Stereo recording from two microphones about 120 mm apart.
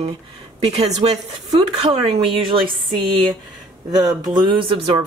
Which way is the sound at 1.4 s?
45° right (ahead or behind).